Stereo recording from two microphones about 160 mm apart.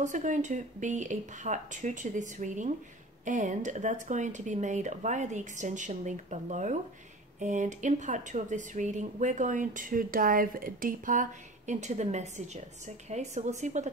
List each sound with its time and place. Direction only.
0.0 s speech: 50° right (ahead or behind)